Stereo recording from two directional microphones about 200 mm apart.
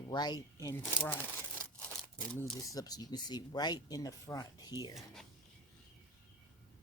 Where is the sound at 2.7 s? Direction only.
20° left (ahead or behind).